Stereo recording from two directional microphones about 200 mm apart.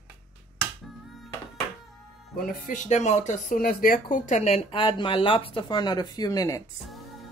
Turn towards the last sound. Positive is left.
turn(degrees=15)  # may be behind; listen again after turning